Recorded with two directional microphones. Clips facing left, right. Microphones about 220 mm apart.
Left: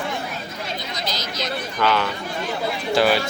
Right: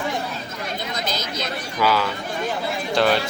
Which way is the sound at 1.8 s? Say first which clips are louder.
Right 1 dB; 5° right (ahead or behind).